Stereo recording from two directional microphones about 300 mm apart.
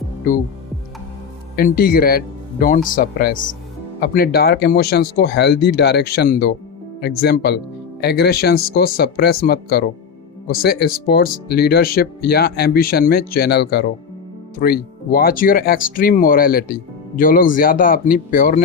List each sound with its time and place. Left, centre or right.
1.5 s speech: left